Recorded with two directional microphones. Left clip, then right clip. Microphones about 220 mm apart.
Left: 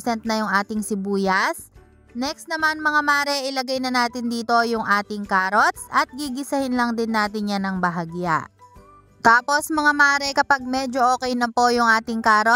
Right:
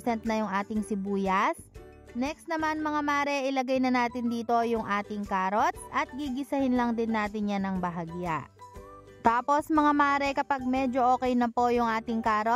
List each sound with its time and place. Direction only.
0.0 s a woman's voice: 5° left (ahead or behind)
12.2 s a woman's voice: 20° left (ahead or behind)